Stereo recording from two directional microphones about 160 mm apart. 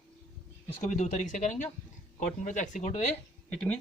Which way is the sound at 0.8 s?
45° left (ahead or behind).